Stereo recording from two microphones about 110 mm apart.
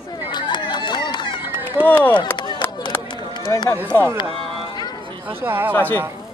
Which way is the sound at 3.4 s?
40° left (ahead or behind).